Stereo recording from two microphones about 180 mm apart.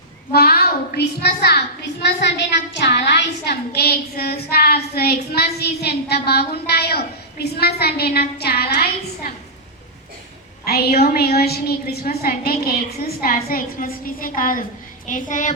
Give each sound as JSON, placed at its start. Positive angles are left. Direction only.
{"t": 0.3, "sound": "a woman's voice", "side_deg": 60}
{"t": 10.7, "sound": "a woman's voice", "side_deg": 60}